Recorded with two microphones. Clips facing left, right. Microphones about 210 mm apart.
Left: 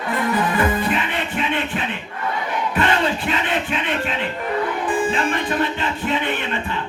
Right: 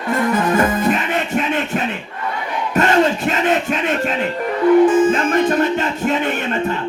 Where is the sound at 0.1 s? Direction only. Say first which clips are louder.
Right 4 dB; 45° right (ahead or behind).